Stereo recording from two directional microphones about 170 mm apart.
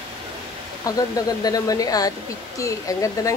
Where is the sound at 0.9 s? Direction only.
20° left (ahead or behind).